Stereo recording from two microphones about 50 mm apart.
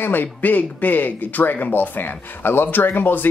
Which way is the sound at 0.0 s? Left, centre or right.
Left.